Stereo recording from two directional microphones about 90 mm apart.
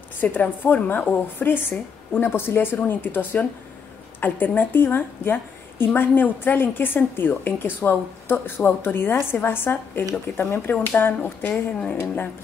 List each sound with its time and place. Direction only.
0.2 s a woman's voice: 20° left (ahead or behind)
11.5 s speech: 10° left (ahead or behind)